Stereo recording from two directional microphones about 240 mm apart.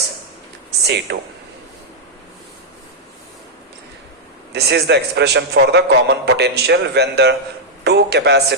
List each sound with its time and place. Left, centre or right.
0.9 s a man's voice: right
4.5 s a man's voice: right